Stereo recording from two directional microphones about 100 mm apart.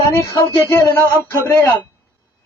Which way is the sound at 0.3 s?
30° left (ahead or behind).